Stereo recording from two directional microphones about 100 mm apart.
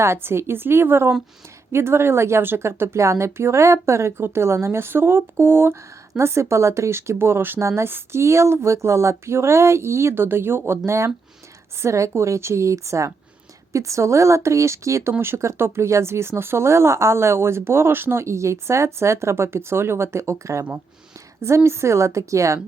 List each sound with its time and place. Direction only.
0.0 s speech: 25° right (ahead or behind)